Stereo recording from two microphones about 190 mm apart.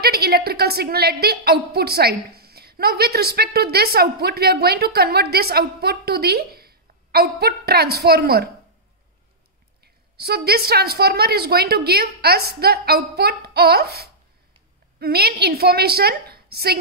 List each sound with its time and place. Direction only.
0.0 s a woman's voice: 55° right (ahead or behind)
10.1 s a woman's voice: 55° right (ahead or behind)